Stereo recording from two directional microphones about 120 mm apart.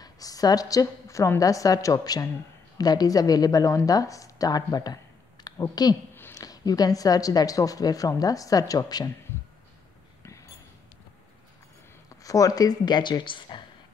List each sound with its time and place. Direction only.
0.0 s a woman's voice: 30° left (ahead or behind)
10.2 s a sound: 25° left (ahead or behind)
12.2 s a woman's voice: 30° left (ahead or behind)